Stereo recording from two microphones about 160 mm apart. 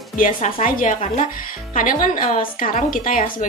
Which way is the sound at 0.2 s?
50° left (ahead or behind).